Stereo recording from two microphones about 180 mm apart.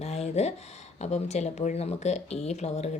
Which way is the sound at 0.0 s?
35° left (ahead or behind).